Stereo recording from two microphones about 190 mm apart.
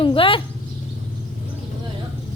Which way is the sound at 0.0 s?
30° left (ahead or behind).